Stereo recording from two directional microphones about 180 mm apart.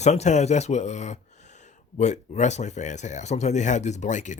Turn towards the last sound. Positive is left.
turn(degrees=45)  # may be behind; listen again after turning